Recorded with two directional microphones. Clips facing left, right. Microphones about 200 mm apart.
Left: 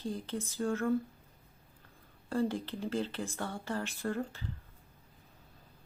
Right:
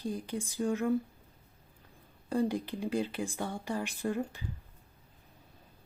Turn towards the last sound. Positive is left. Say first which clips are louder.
# right 2 dB
turn(degrees=-15)  # may be behind; listen again after turning